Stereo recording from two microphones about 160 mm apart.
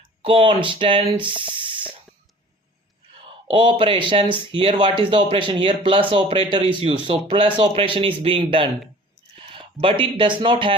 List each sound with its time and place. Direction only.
0.2 s speech: 35° right (ahead or behind)
3.4 s speech: 30° right (ahead or behind)